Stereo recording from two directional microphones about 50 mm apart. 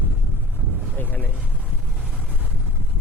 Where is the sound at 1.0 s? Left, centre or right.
Left.